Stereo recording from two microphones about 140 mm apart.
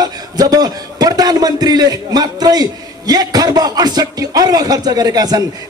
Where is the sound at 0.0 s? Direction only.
30° right (ahead or behind).